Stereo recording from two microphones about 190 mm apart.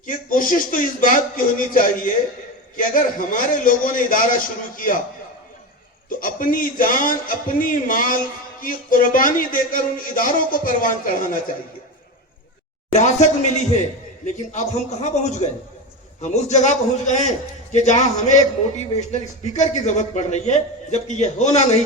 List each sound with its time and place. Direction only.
0.0 s a man's voice: 45° left (ahead or behind)
6.1 s a man's voice: 45° left (ahead or behind)
12.9 s a man's voice: 35° left (ahead or behind)